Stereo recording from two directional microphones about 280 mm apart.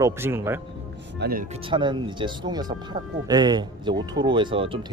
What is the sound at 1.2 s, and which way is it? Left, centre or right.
Speech, right.